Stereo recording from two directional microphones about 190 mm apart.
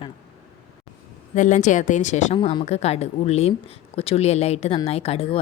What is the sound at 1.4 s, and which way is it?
A woman's voice, 40° left (ahead or behind).